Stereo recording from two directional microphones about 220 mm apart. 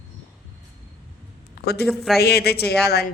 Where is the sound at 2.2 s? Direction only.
45° left (ahead or behind).